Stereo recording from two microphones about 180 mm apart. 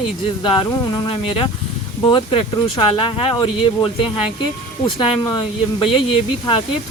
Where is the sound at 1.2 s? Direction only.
30° left (ahead or behind).